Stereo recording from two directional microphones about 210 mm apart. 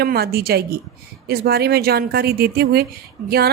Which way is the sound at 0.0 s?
45° right (ahead or behind).